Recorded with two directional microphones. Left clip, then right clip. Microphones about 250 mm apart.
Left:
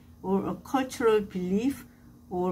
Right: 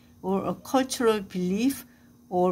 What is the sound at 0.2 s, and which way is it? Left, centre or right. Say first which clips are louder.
Speech: right 1 dB; right.